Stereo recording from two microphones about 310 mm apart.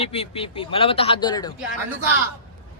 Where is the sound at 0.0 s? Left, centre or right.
Centre.